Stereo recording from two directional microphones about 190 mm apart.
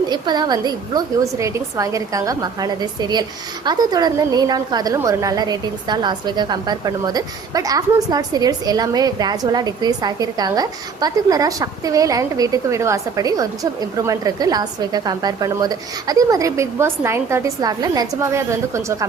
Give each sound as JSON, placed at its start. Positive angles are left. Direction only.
{"t": 0.1, "sound": "a woman's voice", "side_deg": -20}